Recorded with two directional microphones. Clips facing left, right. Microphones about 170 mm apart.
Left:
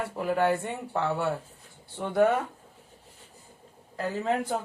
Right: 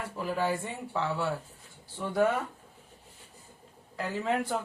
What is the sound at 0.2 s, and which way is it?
Speech, 60° left (ahead or behind).